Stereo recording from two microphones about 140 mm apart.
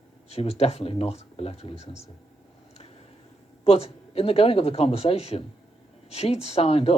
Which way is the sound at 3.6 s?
45° left (ahead or behind).